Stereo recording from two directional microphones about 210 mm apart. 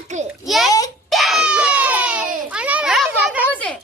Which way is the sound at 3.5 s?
5° left (ahead or behind).